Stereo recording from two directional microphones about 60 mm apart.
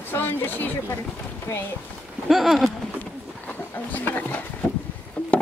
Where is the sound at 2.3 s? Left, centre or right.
Centre.